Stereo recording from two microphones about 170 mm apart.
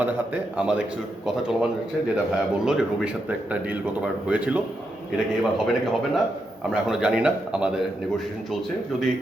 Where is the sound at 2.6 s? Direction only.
5° right (ahead or behind).